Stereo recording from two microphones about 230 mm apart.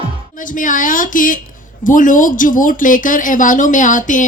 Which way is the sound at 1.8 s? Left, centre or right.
Left.